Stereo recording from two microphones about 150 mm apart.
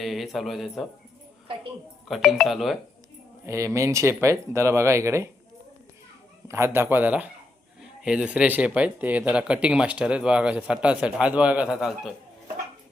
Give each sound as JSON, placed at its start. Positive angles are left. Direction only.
{"t": 0.0, "sound": "speech", "side_deg": 0}
{"t": 2.0, "sound": "speech", "side_deg": 0}
{"t": 3.4, "sound": "speech", "side_deg": -20}
{"t": 6.5, "sound": "speech", "side_deg": -15}